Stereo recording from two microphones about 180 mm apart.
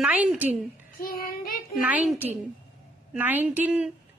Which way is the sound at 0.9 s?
55° left (ahead or behind).